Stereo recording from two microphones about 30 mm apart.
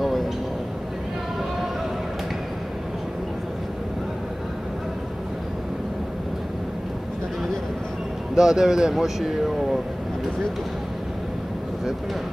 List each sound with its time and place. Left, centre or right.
0.0 s a sound: centre
8.4 s speech: centre
8.9 s vehicle: centre